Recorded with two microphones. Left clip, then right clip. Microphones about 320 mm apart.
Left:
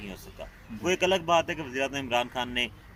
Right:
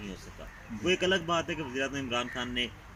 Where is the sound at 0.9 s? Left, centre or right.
Centre.